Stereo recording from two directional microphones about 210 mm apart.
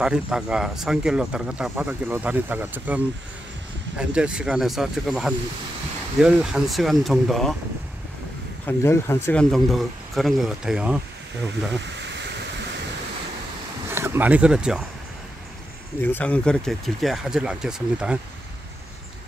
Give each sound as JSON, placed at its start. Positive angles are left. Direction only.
{"t": 0.0, "sound": "speech", "side_deg": -5}
{"t": 4.0, "sound": "speech", "side_deg": -5}
{"t": 8.6, "sound": "speech", "side_deg": 10}
{"t": 12.0, "sound": "a sound", "side_deg": -55}
{"t": 13.8, "sound": "speech", "side_deg": -10}
{"t": 16.0, "sound": "speech", "side_deg": 10}